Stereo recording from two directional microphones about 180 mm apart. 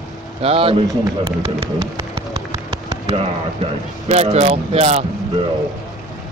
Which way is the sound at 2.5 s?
15° right (ahead or behind).